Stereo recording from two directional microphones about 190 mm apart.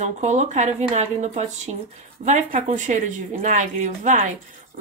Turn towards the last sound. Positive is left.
turn(degrees=-45)  # may be behind; listen again after turning